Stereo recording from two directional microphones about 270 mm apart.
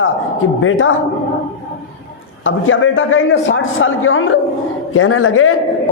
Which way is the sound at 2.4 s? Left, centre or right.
Left.